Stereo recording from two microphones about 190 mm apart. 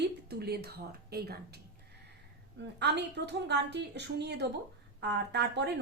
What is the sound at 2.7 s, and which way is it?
A woman's voice, 60° right (ahead or behind).